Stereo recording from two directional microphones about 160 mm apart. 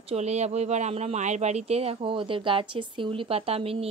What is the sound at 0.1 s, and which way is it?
Speech, 45° right (ahead or behind).